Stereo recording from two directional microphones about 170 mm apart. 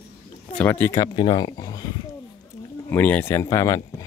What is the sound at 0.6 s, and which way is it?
Speech, 10° left (ahead or behind).